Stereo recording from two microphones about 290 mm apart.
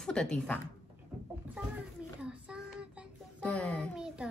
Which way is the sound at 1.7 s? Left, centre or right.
Centre.